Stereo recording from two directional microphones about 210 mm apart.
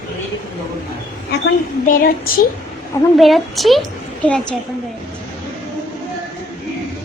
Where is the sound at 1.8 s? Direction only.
40° left (ahead or behind).